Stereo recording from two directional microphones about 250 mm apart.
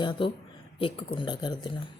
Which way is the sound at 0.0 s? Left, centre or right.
Centre.